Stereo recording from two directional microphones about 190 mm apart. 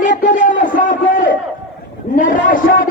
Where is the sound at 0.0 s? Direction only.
40° left (ahead or behind).